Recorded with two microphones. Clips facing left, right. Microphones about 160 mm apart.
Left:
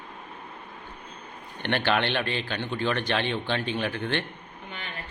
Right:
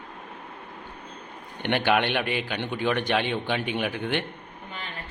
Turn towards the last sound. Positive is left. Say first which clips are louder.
# right 1 dB
turn(degrees=-15)  # may be behind; listen again after turning